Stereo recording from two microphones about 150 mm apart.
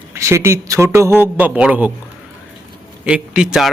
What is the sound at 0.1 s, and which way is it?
A man's voice, 20° right (ahead or behind).